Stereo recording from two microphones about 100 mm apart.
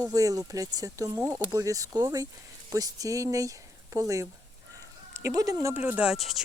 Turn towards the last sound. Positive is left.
turn(degrees=0)  # may be behind; listen again after turning